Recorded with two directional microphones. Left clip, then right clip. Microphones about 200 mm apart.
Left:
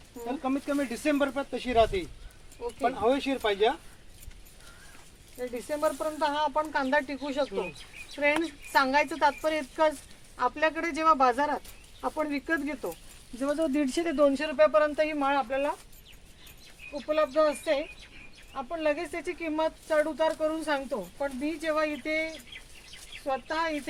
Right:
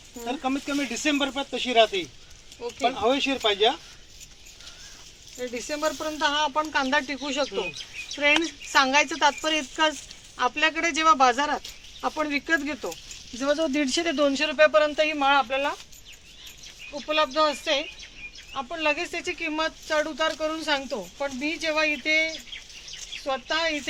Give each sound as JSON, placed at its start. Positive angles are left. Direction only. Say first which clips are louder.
{"t": 0.3, "sound": "speech", "louder": "right 3 dB", "side_deg": -5}
{"t": 5.4, "sound": "speech", "louder": "right 1 dB", "side_deg": -15}
{"t": 16.9, "sound": "speech", "louder": "right 2 dB", "side_deg": 0}